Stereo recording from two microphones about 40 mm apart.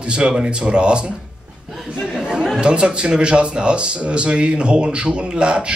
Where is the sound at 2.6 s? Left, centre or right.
Right.